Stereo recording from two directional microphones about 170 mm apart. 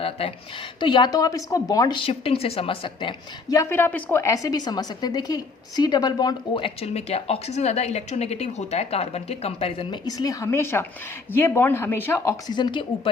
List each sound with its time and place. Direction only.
0.0 s a woman's voice: 35° left (ahead or behind)
3.6 s a woman's voice: 15° left (ahead or behind)
6.8 s a woman's voice: 35° left (ahead or behind); by 12.3 s 15° left (ahead or behind)
12.5 s a woman's voice: 25° left (ahead or behind)